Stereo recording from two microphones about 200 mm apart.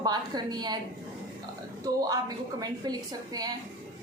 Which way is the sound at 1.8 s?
20° right (ahead or behind).